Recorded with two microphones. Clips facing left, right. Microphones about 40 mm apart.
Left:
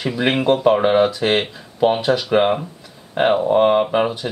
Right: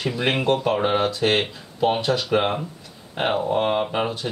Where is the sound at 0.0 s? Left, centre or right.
Centre.